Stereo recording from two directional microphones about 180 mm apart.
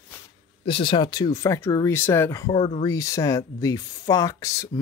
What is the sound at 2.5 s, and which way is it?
Speech, 30° left (ahead or behind).